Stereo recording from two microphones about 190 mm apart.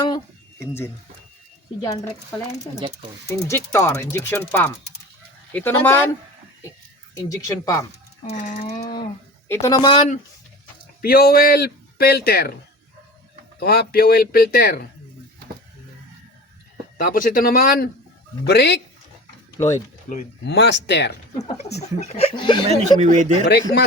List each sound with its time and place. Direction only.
3.4 s speech: 15° left (ahead or behind)
7.1 s speech: 20° left (ahead or behind)
8.3 s speech: 40° left (ahead or behind)
9.5 s speech: 15° left (ahead or behind)
11.0 s a man's voice: 50° left (ahead or behind)
13.6 s a man's voice: 55° left (ahead or behind)
17.0 s speech: 45° left (ahead or behind)
18.4 s a man's voice: 60° left (ahead or behind)
20.1 s a man's voice: 55° left (ahead or behind)
21.3 s speech: 35° left (ahead or behind)
22.7 s speech: 40° right (ahead or behind)
23.5 s a man's voice: 60° left (ahead or behind)